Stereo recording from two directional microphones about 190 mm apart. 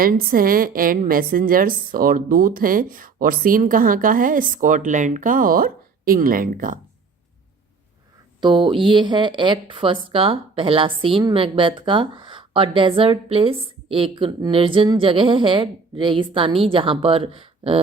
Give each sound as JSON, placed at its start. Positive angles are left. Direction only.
{"t": 0.0, "sound": "a woman's voice", "side_deg": -50}
{"t": 8.4, "sound": "speech", "side_deg": -25}